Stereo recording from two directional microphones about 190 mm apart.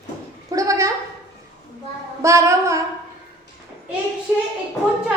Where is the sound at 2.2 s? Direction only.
15° right (ahead or behind).